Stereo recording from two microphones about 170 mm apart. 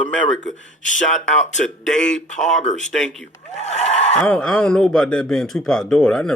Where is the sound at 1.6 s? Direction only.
5° left (ahead or behind).